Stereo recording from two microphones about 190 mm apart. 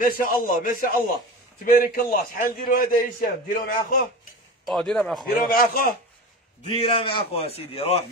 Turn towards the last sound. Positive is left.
turn(degrees=30)  # may be behind; listen again after turning